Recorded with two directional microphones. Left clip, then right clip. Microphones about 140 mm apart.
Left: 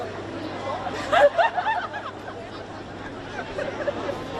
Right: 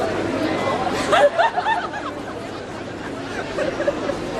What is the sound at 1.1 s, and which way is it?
Snicker, 35° right (ahead or behind).